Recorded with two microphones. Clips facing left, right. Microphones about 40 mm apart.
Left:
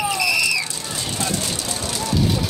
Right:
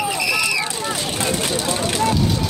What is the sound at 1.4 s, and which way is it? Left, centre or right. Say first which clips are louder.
Vehicle: right 6 dB; right.